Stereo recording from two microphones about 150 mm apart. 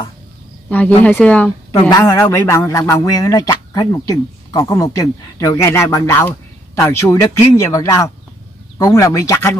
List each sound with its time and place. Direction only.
0.7 s speech: 10° left (ahead or behind)
1.7 s speech: 25° left (ahead or behind)